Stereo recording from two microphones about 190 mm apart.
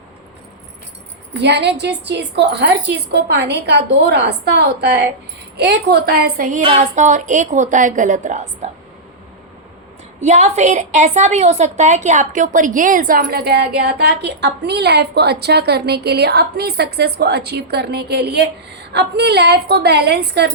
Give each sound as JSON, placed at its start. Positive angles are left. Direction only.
{"t": 1.4, "sound": "a woman's voice", "side_deg": -65}
{"t": 10.2, "sound": "a woman's voice", "side_deg": -35}